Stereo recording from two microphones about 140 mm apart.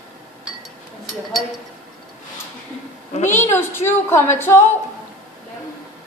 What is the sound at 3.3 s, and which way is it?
A woman's voice, 15° left (ahead or behind).